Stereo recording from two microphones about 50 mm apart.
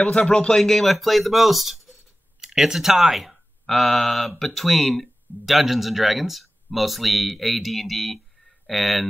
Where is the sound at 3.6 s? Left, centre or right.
Centre.